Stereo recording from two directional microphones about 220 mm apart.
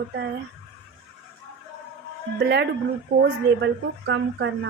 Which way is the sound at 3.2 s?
55° right (ahead or behind).